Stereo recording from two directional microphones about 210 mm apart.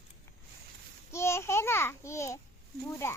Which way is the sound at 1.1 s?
10° left (ahead or behind).